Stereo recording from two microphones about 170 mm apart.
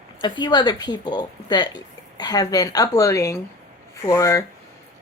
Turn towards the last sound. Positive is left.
turn(degrees=20)  # may be behind; listen again after turning